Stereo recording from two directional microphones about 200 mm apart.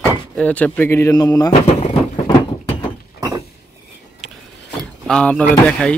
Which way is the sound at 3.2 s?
15° right (ahead or behind).